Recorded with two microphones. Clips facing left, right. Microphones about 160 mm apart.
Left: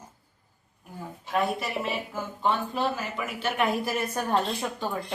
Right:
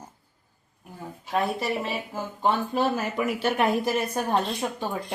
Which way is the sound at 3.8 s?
15° right (ahead or behind).